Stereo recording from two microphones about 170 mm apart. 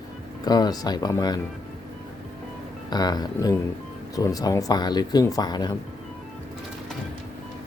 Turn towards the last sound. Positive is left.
turn(degrees=25)  # may be behind; listen again after turning